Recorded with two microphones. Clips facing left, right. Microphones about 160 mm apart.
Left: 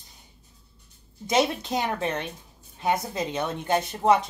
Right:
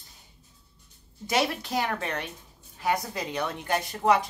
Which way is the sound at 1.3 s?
20° left (ahead or behind).